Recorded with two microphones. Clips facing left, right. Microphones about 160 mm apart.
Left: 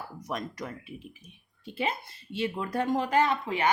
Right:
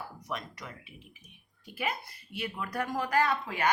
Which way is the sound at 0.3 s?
40° left (ahead or behind).